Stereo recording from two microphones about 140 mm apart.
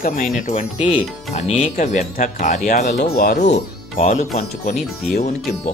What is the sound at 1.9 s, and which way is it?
Speech, 65° left (ahead or behind).